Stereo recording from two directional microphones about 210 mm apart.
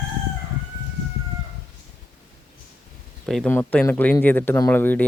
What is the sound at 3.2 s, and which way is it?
Speech, 5° left (ahead or behind).